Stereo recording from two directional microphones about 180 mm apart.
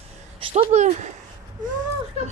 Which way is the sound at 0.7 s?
40° right (ahead or behind).